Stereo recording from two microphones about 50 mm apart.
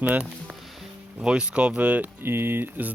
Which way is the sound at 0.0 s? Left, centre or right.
Right.